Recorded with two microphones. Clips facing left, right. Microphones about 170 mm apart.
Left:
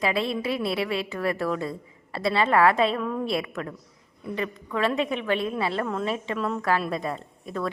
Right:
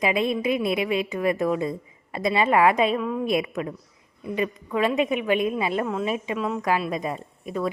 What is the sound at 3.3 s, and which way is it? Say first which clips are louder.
A woman's voice: right 4 dB; 20° right (ahead or behind).